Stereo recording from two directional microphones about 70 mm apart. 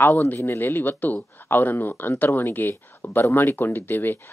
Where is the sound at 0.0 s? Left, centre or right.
Left.